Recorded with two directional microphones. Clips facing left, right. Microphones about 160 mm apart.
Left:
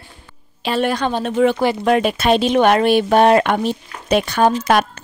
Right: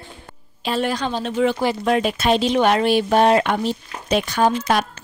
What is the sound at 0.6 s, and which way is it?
A woman's voice, 60° left (ahead or behind).